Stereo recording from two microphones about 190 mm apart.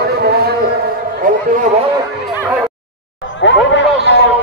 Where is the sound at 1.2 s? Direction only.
45° right (ahead or behind).